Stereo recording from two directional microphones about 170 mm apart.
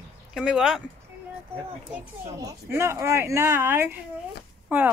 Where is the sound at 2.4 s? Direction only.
15° right (ahead or behind).